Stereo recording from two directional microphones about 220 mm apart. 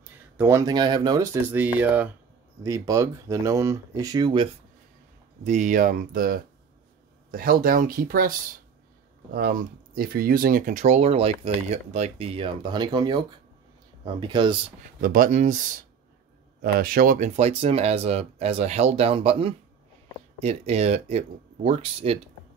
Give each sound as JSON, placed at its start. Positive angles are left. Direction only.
{"t": 0.4, "sound": "speech", "side_deg": -15}
{"t": 5.4, "sound": "speech", "side_deg": -35}
{"t": 15.0, "sound": "speech", "side_deg": -40}